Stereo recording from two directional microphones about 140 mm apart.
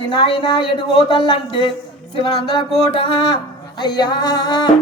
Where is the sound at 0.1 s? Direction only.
35° left (ahead or behind).